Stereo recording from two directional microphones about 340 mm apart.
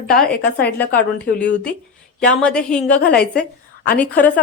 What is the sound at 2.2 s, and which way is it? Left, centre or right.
A woman's voice, centre.